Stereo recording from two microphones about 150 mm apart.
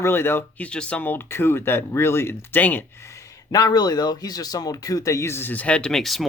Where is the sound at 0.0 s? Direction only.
15° left (ahead or behind).